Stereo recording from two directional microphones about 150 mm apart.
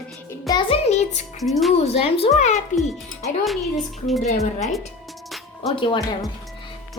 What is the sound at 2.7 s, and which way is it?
Music, 55° left (ahead or behind).